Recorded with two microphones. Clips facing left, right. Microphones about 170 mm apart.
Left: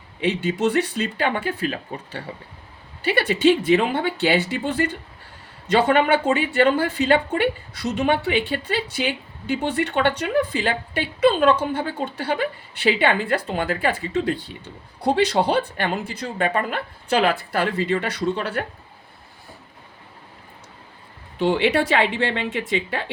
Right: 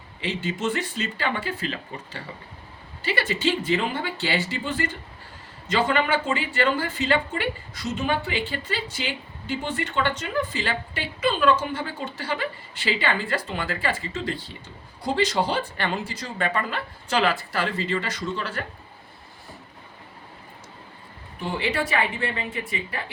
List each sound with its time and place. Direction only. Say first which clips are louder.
0.2 s a woman's voice: left 7 dB; 65° left (ahead or behind)
21.3 s speech: left 8 dB; 80° left